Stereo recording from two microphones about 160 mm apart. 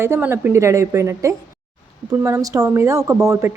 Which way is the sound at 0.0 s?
15° right (ahead or behind).